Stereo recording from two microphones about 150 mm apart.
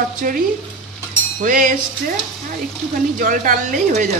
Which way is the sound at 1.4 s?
65° right (ahead or behind).